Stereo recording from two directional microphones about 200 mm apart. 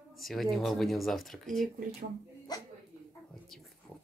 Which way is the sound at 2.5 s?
20° left (ahead or behind).